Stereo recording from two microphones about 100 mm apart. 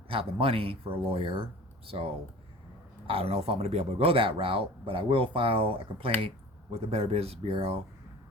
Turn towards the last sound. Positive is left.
turn(degrees=-75)  # may be behind; listen again after turning